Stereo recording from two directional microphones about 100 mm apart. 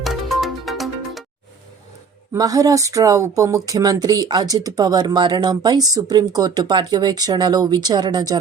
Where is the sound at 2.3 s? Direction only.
35° right (ahead or behind).